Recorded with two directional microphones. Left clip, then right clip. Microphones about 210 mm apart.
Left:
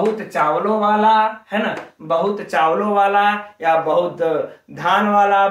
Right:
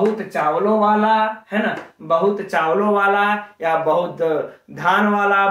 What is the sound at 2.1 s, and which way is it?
Speech, 15° right (ahead or behind).